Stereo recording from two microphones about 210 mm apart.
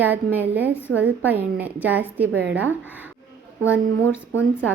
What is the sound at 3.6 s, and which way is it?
Speech, 10° left (ahead or behind).